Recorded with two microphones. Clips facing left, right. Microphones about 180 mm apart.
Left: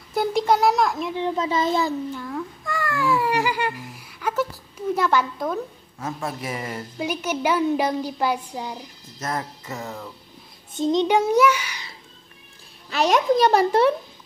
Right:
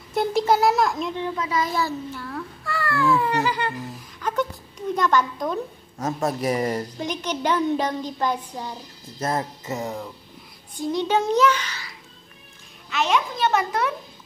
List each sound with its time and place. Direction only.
0.1 s a sound: centre (ahead or behind)
1.1 s a child's voice: 25° left (ahead or behind)
3.9 s a sound: 10° left (ahead or behind)
4.9 s a child's voice: 10° left (ahead or behind)
5.9 s speech: 40° right (ahead or behind)
7.0 s a child's voice: 10° left (ahead or behind)
9.2 s music: 25° right (ahead or behind)
10.7 s a child's voice: 20° left (ahead or behind)
12.9 s a child's voice: 40° left (ahead or behind)